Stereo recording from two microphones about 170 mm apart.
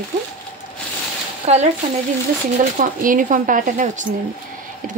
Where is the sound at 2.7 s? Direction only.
50° right (ahead or behind).